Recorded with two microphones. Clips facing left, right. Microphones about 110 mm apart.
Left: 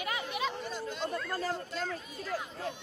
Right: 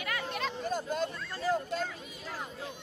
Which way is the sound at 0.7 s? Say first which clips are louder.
Right 5 dB; 45° right (ahead or behind).